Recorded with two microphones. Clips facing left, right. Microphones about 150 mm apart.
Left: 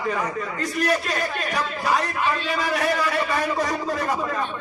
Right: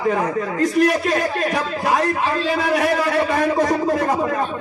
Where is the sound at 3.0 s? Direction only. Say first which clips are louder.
Right 5 dB; 50° right (ahead or behind).